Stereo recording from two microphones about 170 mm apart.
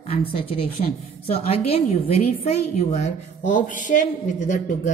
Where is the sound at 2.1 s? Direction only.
40° left (ahead or behind).